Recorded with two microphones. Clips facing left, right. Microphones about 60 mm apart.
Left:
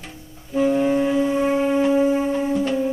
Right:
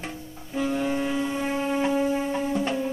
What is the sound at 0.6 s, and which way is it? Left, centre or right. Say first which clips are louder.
Music: left 7 dB; centre.